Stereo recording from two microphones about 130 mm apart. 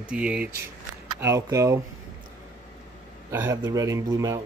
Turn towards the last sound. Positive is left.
turn(degrees=-25)  # may be behind; listen again after turning